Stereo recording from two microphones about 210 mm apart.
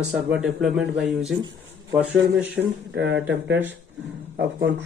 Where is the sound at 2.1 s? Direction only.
60° right (ahead or behind).